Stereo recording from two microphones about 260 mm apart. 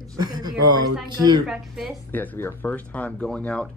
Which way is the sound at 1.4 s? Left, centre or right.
Centre.